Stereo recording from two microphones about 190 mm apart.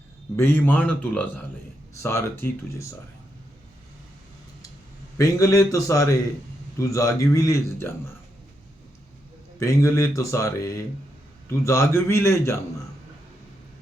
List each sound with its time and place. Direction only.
0.3 s a man's voice: 10° left (ahead or behind)
5.1 s a man's voice: 15° left (ahead or behind)
9.6 s a man's voice: 15° left (ahead or behind)